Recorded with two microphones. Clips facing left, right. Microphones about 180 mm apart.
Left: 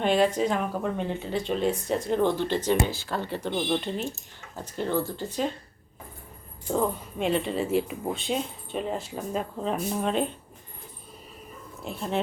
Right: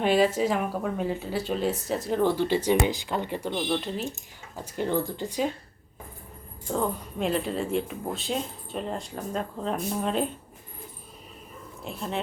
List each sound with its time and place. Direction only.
0.0 s speech: 5° right (ahead or behind)
3.5 s speech: centre (ahead or behind)
4.5 s speech: 10° right (ahead or behind)
6.7 s speech: centre (ahead or behind)
11.8 s speech: centre (ahead or behind)